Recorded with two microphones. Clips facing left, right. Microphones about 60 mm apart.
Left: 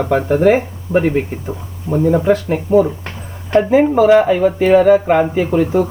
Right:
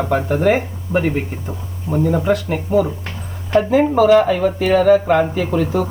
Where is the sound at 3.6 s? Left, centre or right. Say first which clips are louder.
Left 3 dB; centre.